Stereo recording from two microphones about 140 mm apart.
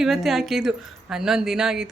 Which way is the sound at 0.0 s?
Centre (ahead or behind).